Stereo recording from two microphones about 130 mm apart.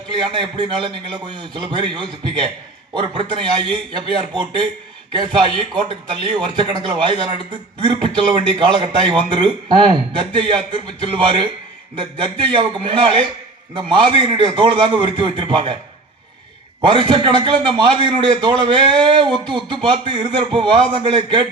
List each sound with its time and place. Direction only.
0.3 s speech: 35° right (ahead or behind)
5.1 s speech: 35° right (ahead or behind)
16.8 s speech: 35° right (ahead or behind)